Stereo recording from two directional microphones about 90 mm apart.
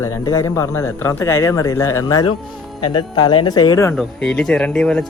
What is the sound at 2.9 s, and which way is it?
Speech, 55° left (ahead or behind).